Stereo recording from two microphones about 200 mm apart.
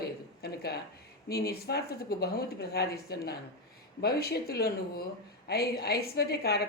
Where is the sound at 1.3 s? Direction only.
50° left (ahead or behind).